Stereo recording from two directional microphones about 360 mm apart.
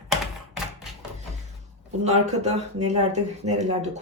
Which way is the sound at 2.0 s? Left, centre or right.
Centre.